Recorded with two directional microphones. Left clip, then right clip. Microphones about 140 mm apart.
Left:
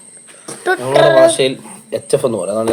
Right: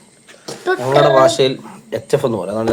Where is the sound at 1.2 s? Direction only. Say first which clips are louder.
Left 2 dB; 15° right (ahead or behind).